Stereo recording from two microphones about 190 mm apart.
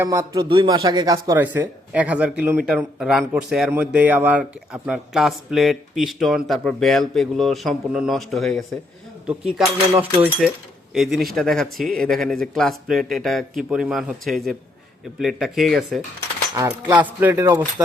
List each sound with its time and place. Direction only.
0.0 s a man's voice: 15° right (ahead or behind); by 16.0 s centre (ahead or behind)
16.6 s a man's voice: 10° right (ahead or behind)